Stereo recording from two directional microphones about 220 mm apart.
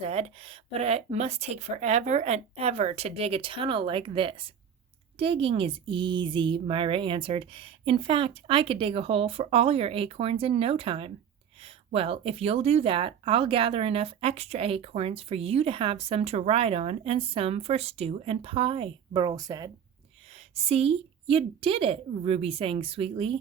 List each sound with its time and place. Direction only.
0.0 s speech: 25° right (ahead or behind)
20.6 s speech: 25° right (ahead or behind)